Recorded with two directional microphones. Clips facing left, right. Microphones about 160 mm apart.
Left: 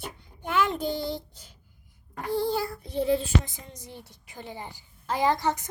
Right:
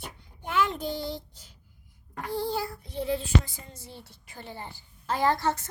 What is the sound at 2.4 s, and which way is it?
Child singing, 55° left (ahead or behind).